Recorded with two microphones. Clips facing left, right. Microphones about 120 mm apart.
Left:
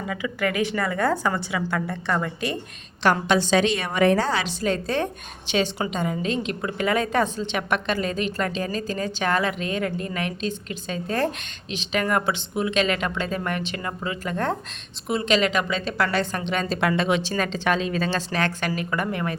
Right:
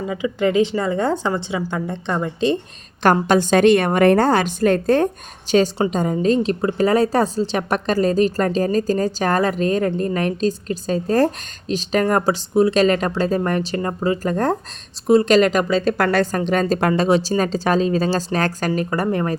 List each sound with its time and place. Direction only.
0.0 s a woman's voice: 25° right (ahead or behind)
3.0 s a woman's voice: 45° right (ahead or behind)